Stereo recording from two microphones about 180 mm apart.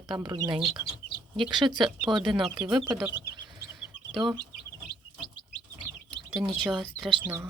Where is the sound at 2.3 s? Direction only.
Centre (ahead or behind).